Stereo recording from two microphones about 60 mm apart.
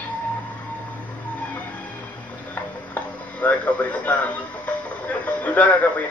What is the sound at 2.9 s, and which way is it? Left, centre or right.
Music, left.